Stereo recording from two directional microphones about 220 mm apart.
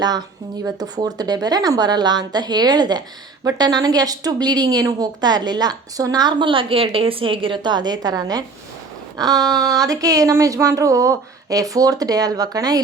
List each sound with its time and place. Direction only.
0.6 s a woman's voice: 15° right (ahead or behind)
9.1 s a sound: 15° right (ahead or behind)
9.5 s a woman's voice: 15° right (ahead or behind)